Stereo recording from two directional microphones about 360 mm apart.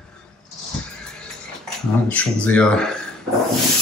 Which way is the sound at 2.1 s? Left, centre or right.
Centre.